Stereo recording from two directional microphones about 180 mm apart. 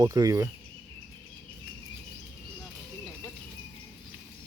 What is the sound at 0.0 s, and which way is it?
Speech, 20° right (ahead or behind).